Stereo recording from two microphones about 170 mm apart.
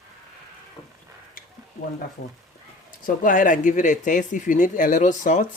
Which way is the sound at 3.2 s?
50° left (ahead or behind).